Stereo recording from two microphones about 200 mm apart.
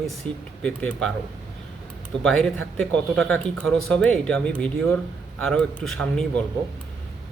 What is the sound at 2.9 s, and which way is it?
A man's voice, 5° left (ahead or behind).